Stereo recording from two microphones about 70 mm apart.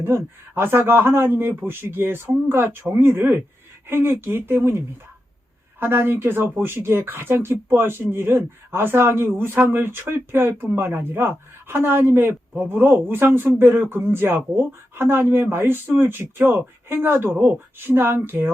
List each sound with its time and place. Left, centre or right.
0.0 s speech: right
5.8 s speech: right